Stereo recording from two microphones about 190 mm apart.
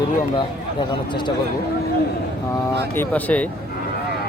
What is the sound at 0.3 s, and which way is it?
Speech, 25° left (ahead or behind).